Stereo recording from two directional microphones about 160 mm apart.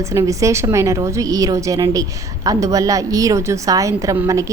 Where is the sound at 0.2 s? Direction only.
20° right (ahead or behind).